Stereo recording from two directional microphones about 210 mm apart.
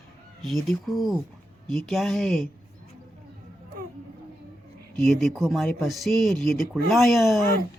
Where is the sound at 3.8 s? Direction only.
40° right (ahead or behind).